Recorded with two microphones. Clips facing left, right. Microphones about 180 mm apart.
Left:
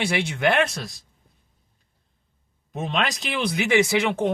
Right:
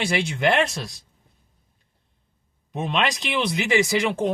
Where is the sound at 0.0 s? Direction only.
55° left (ahead or behind).